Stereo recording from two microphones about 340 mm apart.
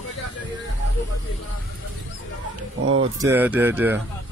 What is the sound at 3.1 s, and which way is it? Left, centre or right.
Speech, centre.